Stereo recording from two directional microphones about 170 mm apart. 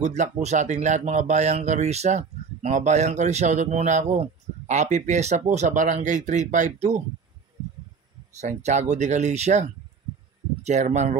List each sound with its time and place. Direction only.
0.0 s speech: 40° right (ahead or behind)
8.4 s speech: 45° right (ahead or behind)